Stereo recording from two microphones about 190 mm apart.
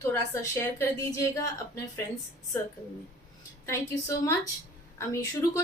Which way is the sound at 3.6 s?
15° left (ahead or behind).